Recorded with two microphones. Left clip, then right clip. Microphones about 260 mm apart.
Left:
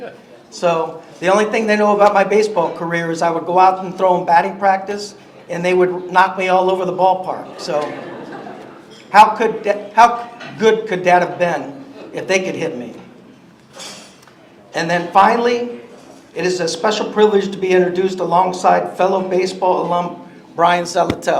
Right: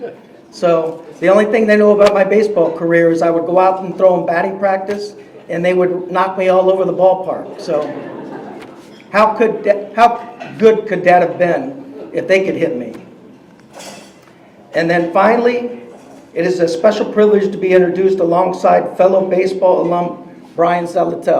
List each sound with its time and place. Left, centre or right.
1.2 s a man's voice: centre
9.1 s a man's voice: left
14.7 s a man's voice: centre
20.6 s a man's voice: left